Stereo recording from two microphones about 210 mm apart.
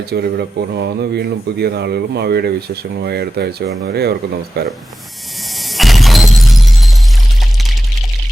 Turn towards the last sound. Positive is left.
turn(degrees=0)  # may be behind; listen again after turning